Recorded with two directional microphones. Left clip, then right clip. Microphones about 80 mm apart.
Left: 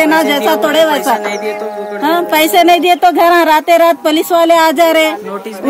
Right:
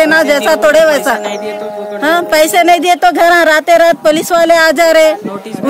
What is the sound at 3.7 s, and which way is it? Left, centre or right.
Speech, right.